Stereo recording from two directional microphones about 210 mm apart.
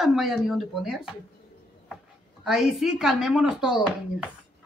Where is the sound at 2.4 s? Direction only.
Centre (ahead or behind).